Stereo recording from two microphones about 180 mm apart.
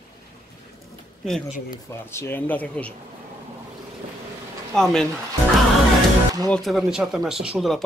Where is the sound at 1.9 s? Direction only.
15° left (ahead or behind).